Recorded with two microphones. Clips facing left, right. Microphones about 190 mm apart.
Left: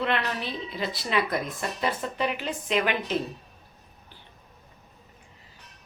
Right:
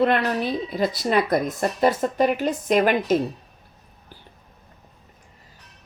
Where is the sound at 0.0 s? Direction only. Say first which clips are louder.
Right 8 dB; 45° right (ahead or behind).